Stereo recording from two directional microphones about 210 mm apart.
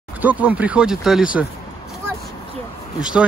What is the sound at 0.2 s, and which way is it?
A child's voice, 5° right (ahead or behind).